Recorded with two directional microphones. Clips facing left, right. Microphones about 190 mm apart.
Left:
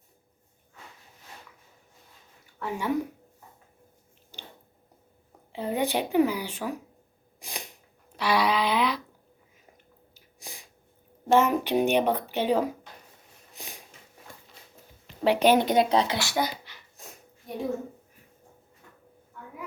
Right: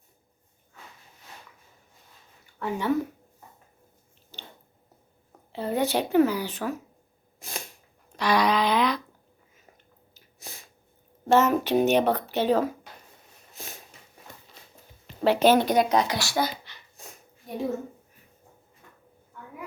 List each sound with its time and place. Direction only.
2.6 s speech: 10° left (ahead or behind)
4.3 s squish: 10° left (ahead or behind)
5.5 s speech: 15° left (ahead or behind)
7.3 s sneeze: 15° left (ahead or behind)
8.1 s a sound: 5° left (ahead or behind)
10.2 s sneeze: 15° left (ahead or behind)
11.3 s speech: 10° left (ahead or behind)
13.6 s a sound: 15° left (ahead or behind)
15.2 s speech: 15° left (ahead or behind)